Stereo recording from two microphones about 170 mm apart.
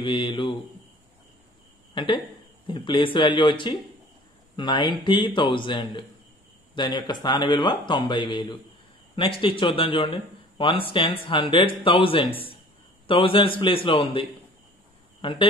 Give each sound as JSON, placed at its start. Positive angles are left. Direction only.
{"t": 0.0, "sound": "speech", "side_deg": 30}
{"t": 2.0, "sound": "speech", "side_deg": 30}
{"t": 15.2, "sound": "speech", "side_deg": 30}